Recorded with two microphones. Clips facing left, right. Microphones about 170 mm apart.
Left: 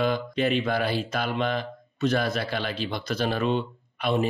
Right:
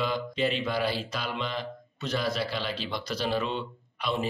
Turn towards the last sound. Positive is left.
turn(degrees=55)  # may be behind; listen again after turning